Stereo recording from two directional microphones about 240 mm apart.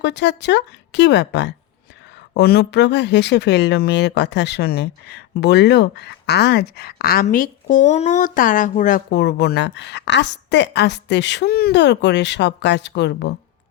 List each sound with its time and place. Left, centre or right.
0.0 s speech: left